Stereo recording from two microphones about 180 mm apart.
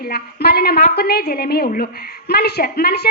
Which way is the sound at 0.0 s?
60° left (ahead or behind).